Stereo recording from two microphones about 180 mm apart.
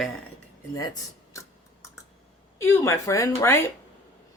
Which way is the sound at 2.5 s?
15° left (ahead or behind).